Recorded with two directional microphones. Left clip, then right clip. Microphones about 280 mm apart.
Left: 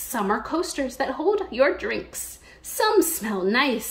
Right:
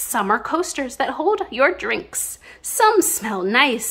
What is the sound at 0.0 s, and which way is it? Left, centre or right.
A woman's voice, centre.